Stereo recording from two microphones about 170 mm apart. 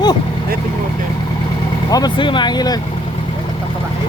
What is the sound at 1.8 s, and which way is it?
Speech, 20° left (ahead or behind).